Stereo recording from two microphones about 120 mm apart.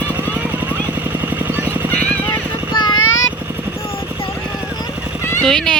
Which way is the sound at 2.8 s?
40° left (ahead or behind).